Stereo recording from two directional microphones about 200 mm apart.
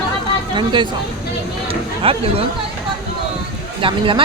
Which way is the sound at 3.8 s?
25° right (ahead or behind).